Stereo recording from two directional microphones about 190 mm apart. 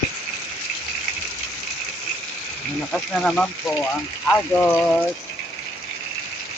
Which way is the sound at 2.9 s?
5° left (ahead or behind).